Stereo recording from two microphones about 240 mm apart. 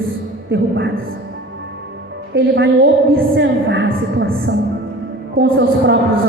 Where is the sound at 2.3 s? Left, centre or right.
Right.